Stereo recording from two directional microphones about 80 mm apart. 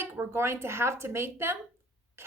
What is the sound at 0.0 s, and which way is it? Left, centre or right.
A woman's voice, right.